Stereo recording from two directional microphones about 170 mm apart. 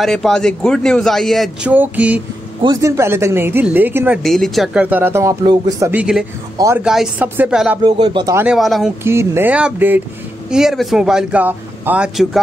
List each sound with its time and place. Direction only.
0.0 s a man's voice: centre (ahead or behind)
1.7 s speech: 10° right (ahead or behind)
2.6 s speech: 20° right (ahead or behind)
4.2 s speech: centre (ahead or behind); by 5.9 s 25° right (ahead or behind)
5.9 s a man's voice: 5° right (ahead or behind)
7.8 s speech: 25° right (ahead or behind)
8.4 s a man's voice: 5° right (ahead or behind)
9.0 s a man's voice: 15° right (ahead or behind)